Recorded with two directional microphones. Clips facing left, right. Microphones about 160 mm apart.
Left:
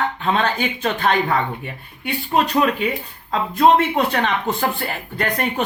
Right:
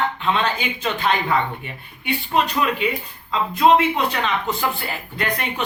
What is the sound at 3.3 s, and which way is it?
Speech, 50° left (ahead or behind).